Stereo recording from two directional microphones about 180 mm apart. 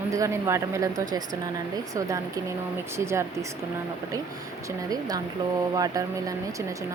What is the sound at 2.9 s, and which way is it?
Speech, 15° right (ahead or behind).